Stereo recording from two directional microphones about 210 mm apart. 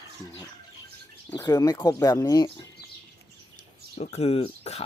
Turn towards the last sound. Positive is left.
turn(degrees=30)  # may be behind; listen again after turning